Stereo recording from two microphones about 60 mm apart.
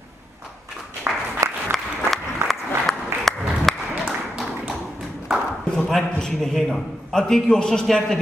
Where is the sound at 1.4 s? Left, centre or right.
Right.